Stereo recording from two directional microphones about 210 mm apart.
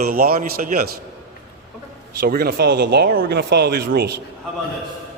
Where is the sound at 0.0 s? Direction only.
45° right (ahead or behind).